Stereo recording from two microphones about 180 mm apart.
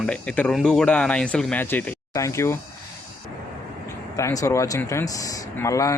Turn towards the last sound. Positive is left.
turn(degrees=15)  # may be behind; listen again after turning